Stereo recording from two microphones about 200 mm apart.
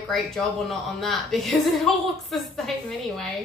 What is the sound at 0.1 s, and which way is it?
A woman's voice, centre (ahead or behind).